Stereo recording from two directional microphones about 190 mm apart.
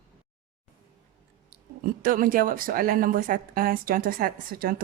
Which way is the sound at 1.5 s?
45° right (ahead or behind).